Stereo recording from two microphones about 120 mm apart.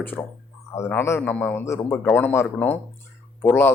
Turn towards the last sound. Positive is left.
turn(degrees=20)  # may be behind; listen again after turning